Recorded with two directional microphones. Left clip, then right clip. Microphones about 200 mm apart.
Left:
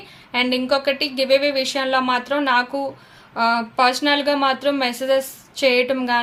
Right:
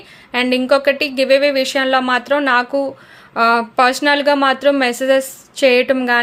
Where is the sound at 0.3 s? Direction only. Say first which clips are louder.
Right 5 dB; 25° right (ahead or behind).